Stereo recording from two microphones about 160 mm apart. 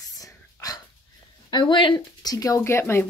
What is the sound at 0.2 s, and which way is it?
Whispering, 20° left (ahead or behind).